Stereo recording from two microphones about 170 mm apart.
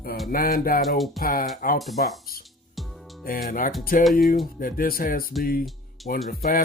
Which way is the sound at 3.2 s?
55° left (ahead or behind).